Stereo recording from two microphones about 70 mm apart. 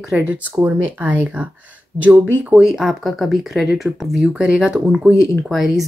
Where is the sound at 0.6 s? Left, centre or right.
Right.